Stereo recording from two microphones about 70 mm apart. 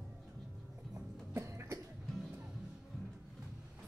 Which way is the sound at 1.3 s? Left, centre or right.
Right.